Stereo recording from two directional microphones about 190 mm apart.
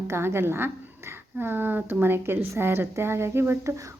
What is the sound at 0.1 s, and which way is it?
A woman's voice, 15° right (ahead or behind).